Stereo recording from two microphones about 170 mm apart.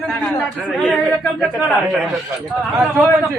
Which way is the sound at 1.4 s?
Centre (ahead or behind).